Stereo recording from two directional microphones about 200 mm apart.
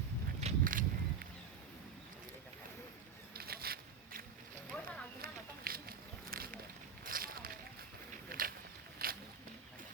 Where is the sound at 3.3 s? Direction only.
50° right (ahead or behind).